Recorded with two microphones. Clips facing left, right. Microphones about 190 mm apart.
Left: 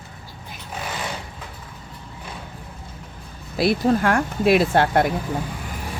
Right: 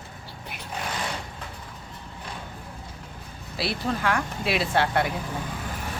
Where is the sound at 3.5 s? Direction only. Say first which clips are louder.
Left 10 dB; 50° left (ahead or behind).